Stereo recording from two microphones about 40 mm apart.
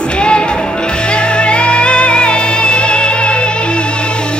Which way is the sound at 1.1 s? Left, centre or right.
Left.